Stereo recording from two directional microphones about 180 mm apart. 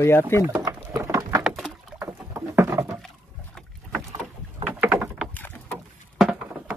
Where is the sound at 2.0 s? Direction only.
15° right (ahead or behind).